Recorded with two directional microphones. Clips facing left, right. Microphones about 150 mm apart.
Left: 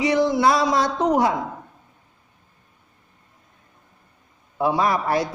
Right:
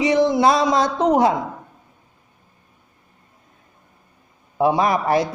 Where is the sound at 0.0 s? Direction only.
20° right (ahead or behind).